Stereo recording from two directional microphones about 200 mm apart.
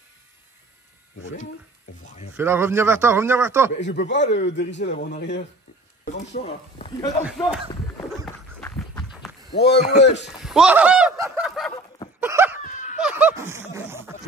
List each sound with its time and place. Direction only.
2.3 s a man's voice: 10° right (ahead or behind)
3.8 s a man's voice: 60° left (ahead or behind)
6.3 s speech: 35° left (ahead or behind)
7.0 s speech: 15° left (ahead or behind)
7.2 s speech: 5° right (ahead or behind)
8.5 s a sound: 5° left (ahead or behind)
9.5 s speech: 55° left (ahead or behind)
10.4 s a sound: 5° right (ahead or behind)
12.6 s snicker: 40° left (ahead or behind)
13.0 s a sound: 10° right (ahead or behind)